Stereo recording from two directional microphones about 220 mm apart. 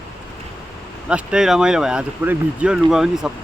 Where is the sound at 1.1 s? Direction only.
5° right (ahead or behind).